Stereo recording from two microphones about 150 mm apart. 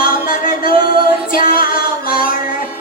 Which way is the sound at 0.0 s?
70° left (ahead or behind).